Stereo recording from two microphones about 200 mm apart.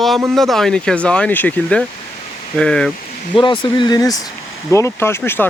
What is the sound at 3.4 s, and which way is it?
Speech, 25° left (ahead or behind).